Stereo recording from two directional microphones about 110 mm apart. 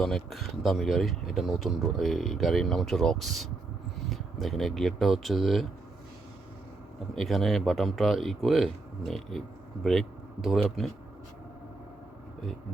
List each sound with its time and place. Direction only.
0.0 s speech: 5° left (ahead or behind)
7.2 s speech: centre (ahead or behind)